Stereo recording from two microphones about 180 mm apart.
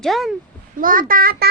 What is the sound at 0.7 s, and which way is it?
Speech, 50° right (ahead or behind).